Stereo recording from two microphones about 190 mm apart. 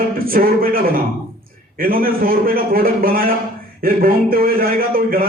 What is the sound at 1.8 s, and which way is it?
A man's voice, 50° right (ahead or behind).